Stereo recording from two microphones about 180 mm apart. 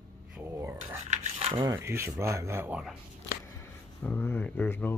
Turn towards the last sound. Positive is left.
turn(degrees=10)  # may be behind; listen again after turning